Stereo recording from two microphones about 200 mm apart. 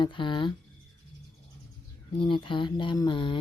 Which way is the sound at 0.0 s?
25° left (ahead or behind).